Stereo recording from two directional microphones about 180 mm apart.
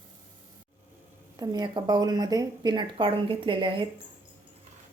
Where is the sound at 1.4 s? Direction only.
20° right (ahead or behind).